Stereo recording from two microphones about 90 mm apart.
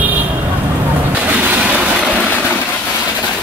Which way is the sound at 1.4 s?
15° right (ahead or behind).